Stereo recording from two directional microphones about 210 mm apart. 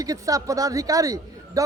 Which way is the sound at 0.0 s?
15° right (ahead or behind).